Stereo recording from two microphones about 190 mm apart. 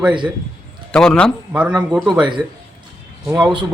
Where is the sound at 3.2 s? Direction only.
5° right (ahead or behind).